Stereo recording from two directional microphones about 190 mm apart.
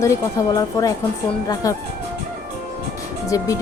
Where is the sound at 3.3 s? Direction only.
15° left (ahead or behind).